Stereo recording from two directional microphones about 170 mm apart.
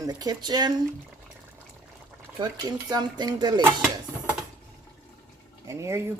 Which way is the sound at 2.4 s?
25° right (ahead or behind).